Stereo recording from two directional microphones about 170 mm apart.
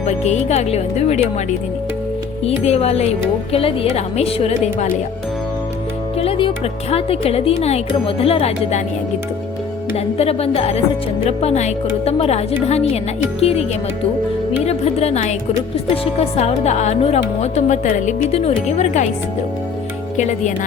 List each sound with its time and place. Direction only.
0.1 s speech: 40° left (ahead or behind)
6.1 s music: 35° left (ahead or behind)
6.9 s speech: 35° left (ahead or behind)
9.9 s speech: 35° left (ahead or behind)